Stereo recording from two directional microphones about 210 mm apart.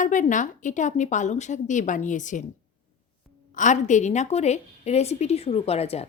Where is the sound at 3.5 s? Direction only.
35° left (ahead or behind).